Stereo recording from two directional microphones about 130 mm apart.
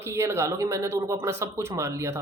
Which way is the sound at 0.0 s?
20° right (ahead or behind).